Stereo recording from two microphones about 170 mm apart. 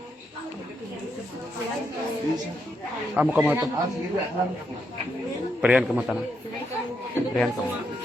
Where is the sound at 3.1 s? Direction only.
10° right (ahead or behind).